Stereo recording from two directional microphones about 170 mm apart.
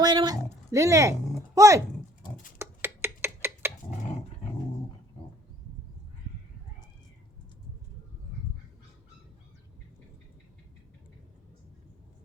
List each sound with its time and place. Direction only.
0.0 s dog: 25° right (ahead or behind)
1.5 s speech: 20° right (ahead or behind)
2.6 s a sound: 15° right (ahead or behind)